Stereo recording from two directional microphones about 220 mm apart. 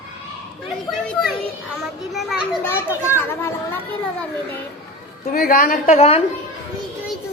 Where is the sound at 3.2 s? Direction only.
10° left (ahead or behind).